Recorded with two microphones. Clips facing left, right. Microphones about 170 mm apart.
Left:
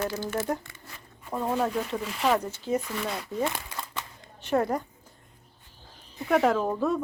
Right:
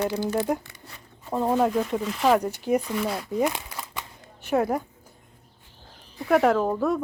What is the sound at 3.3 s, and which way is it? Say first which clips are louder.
Crumpling: right 5 dB; 15° right (ahead or behind).